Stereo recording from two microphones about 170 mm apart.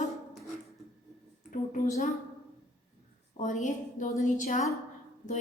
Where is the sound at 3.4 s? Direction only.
45° left (ahead or behind).